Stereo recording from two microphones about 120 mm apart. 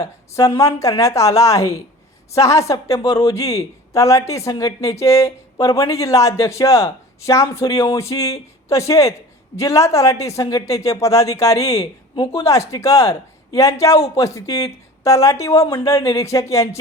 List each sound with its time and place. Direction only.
0.0 s speech: 25° left (ahead or behind)
12.1 s a woman's voice: 45° left (ahead or behind)
12.4 s speech: 25° left (ahead or behind)